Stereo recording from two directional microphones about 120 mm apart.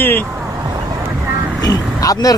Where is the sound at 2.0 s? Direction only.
30° left (ahead or behind).